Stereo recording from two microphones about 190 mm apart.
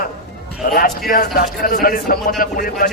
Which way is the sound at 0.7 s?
50° left (ahead or behind).